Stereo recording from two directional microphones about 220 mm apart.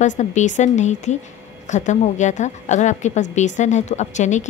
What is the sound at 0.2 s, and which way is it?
A woman's voice, 35° left (ahead or behind).